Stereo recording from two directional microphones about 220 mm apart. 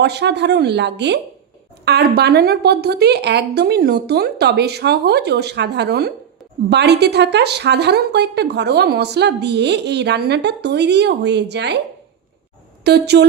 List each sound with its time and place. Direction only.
0.0 s speech: 50° right (ahead or behind)
12.8 s a woman's voice: 50° right (ahead or behind)